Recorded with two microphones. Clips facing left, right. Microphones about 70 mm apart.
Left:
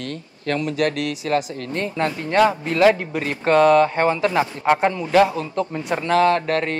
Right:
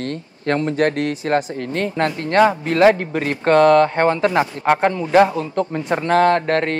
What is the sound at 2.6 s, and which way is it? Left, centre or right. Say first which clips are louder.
A man's voice: right 2 dB; right.